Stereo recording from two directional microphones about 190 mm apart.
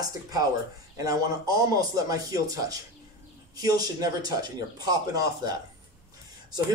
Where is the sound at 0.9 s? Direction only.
20° right (ahead or behind).